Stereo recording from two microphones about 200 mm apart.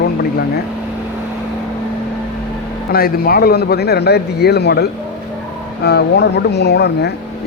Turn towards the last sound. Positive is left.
turn(degrees=55)  # may be behind; listen again after turning